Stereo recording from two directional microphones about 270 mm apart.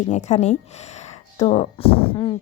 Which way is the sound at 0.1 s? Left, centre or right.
Left.